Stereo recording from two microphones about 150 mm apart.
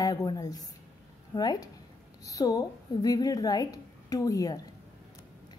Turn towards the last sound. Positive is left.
turn(degrees=25)  # may be behind; listen again after turning